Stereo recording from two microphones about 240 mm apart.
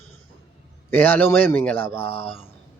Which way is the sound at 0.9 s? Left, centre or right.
Centre.